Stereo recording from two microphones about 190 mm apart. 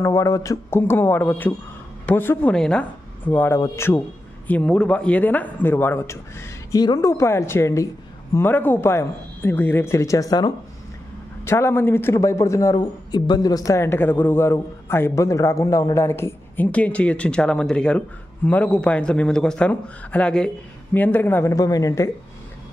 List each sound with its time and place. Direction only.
0.0 s a man's voice: 15° left (ahead or behind)